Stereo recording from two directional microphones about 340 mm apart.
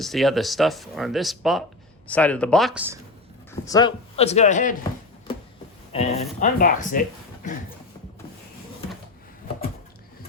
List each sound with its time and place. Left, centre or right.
0.0 s speech: centre
3.5 s speech: centre
5.9 s speech: centre